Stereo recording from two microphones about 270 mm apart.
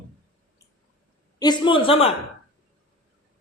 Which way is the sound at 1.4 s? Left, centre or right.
Centre.